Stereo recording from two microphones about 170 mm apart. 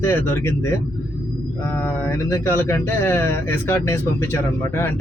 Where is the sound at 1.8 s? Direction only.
10° left (ahead or behind).